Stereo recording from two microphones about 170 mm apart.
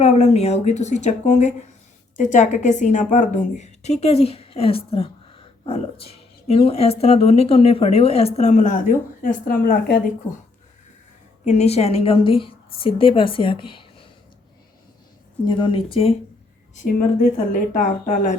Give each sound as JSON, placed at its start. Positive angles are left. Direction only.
{"t": 0.0, "sound": "a woman's voice", "side_deg": 40}
{"t": 11.4, "sound": "a woman's voice", "side_deg": 40}
{"t": 15.4, "sound": "speech", "side_deg": 25}
{"t": 16.7, "sound": "speech", "side_deg": 50}